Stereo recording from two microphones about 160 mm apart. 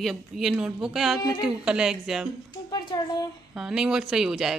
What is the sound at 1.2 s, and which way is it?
Speech, 25° left (ahead or behind).